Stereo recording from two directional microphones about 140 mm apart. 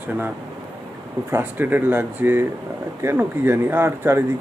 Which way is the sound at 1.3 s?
15° right (ahead or behind).